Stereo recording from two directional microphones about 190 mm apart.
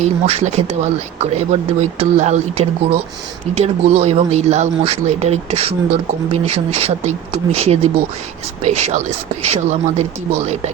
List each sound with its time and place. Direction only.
0.0 s speech: 35° right (ahead or behind)